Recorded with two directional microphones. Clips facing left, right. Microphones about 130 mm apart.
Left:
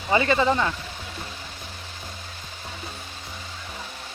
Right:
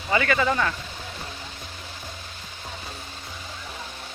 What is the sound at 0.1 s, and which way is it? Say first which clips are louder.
Speech: left 2 dB; 25° left (ahead or behind).